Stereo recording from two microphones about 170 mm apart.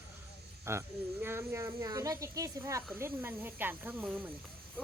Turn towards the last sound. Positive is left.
turn(degrees=-10)  # may be behind; listen again after turning